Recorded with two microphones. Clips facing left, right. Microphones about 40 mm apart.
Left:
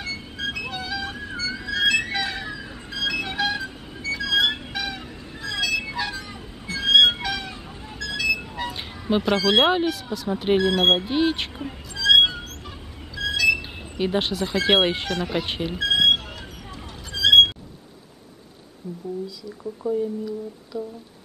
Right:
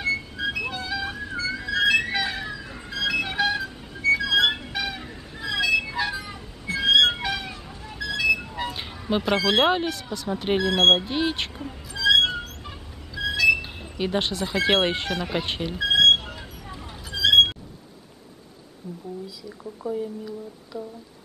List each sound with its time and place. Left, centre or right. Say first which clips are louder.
0.4 s music: right 1 dB; centre
1.3 s music: right 1 dB; right
1.6 s music: even; centre
7.2 s chicken: even; centre
8.0 s music: right 2 dB; centre
8.5 s speech: even; centre
11.9 s music: left 2 dB; centre
13.1 s speech: right 1 dB; centre
15.8 s vehicle: right 2 dB; centre
17.1 s music: left 3 dB; centre
19.2 s speech: left 4 dB; centre